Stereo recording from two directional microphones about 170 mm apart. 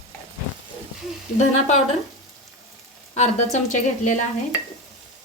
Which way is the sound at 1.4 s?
40° left (ahead or behind).